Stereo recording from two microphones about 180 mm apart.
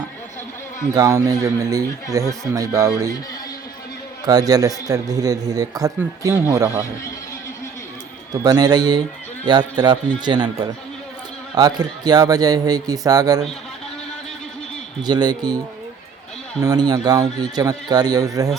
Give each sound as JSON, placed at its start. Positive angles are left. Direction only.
{"t": 0.9, "sound": "speech", "side_deg": -20}
{"t": 4.3, "sound": "speech", "side_deg": -20}
{"t": 8.3, "sound": "speech", "side_deg": -20}
{"t": 11.5, "sound": "speech", "side_deg": -20}
{"t": 15.0, "sound": "speech", "side_deg": -25}